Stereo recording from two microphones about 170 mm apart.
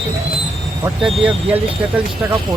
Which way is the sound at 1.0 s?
Centre (ahead or behind).